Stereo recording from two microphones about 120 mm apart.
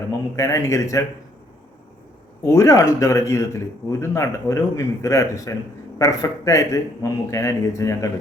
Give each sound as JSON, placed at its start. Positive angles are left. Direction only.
{"t": 0.3, "sound": "a man's voice", "side_deg": 25}
{"t": 2.4, "sound": "a man's voice", "side_deg": 25}